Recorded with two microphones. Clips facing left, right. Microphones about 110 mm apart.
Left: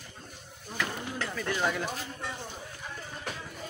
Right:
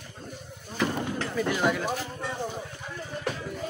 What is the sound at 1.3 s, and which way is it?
Speech, 10° right (ahead or behind).